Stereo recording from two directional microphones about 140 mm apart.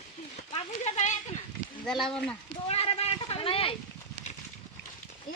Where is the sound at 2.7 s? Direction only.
45° left (ahead or behind).